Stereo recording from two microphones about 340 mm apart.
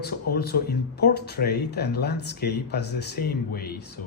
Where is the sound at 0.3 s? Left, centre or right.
Left.